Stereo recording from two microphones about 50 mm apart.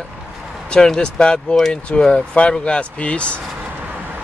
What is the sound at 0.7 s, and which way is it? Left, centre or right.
Speech, centre.